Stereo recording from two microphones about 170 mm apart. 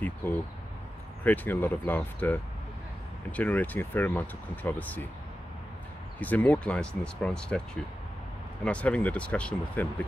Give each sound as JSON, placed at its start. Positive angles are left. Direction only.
{"t": 0.0, "sound": "speech", "side_deg": 10}
{"t": 6.1, "sound": "speech", "side_deg": 10}